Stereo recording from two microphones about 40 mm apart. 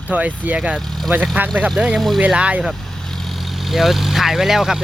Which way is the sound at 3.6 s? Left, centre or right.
Centre.